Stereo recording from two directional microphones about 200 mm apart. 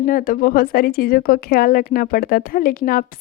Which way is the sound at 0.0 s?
45° left (ahead or behind).